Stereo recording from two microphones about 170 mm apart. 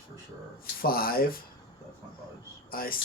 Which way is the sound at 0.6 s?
60° left (ahead or behind).